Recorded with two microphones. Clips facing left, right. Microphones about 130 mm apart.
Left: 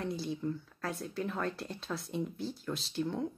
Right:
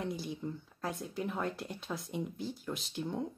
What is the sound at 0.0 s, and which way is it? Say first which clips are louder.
Speech: left 2 dB; 15° right (ahead or behind).